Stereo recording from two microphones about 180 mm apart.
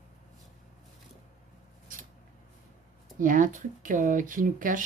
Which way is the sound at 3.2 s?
45° right (ahead or behind).